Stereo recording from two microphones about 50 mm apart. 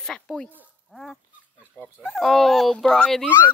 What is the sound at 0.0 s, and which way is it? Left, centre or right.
Speech, centre.